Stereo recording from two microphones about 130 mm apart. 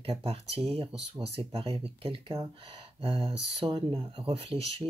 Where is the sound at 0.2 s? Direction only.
50° right (ahead or behind).